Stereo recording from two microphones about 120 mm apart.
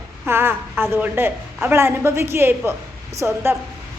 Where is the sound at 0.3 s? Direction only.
20° right (ahead or behind).